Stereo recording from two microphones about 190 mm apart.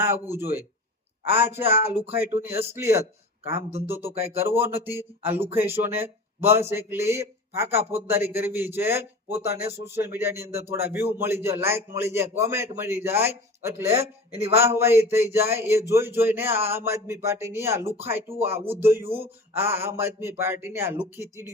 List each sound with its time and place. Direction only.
0.0 s speech: 10° right (ahead or behind)